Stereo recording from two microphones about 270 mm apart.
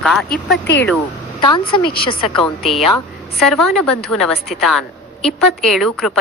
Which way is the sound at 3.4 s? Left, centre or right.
Centre.